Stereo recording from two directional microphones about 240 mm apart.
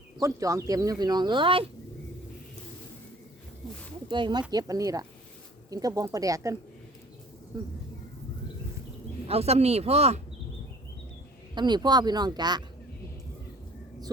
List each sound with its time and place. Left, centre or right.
0.2 s speech: centre
4.1 s speech: centre
9.2 s speech: right
11.5 s speech: centre